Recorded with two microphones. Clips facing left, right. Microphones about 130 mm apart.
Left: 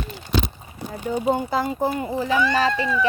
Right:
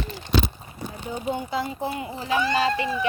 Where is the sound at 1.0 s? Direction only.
45° left (ahead or behind).